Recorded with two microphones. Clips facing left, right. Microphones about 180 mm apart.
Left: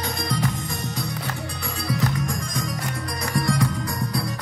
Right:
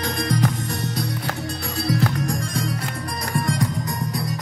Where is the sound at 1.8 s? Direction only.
65° right (ahead or behind).